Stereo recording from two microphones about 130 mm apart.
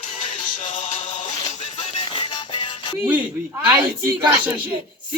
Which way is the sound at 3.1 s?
10° right (ahead or behind).